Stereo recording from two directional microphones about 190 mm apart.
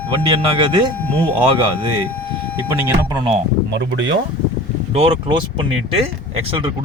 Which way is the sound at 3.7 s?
70° right (ahead or behind).